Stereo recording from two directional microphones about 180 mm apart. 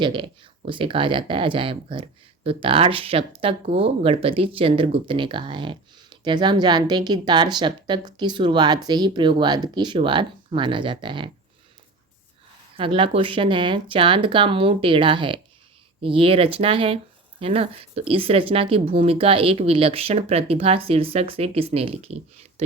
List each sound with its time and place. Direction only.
0.0 s speech: 25° right (ahead or behind)
12.7 s speech: 30° right (ahead or behind)